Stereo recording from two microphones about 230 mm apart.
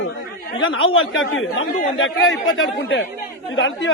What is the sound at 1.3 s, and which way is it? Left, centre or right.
Speech, left.